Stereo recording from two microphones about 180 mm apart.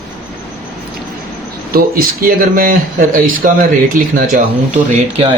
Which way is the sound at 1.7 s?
55° right (ahead or behind).